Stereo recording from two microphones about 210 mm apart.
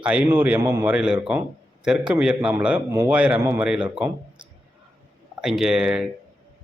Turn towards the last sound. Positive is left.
turn(degrees=-5)  # may be behind; listen again after turning